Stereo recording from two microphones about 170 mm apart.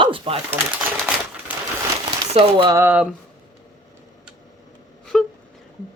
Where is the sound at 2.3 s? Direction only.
35° right (ahead or behind).